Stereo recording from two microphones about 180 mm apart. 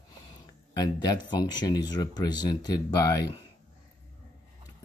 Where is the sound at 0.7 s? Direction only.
25° left (ahead or behind).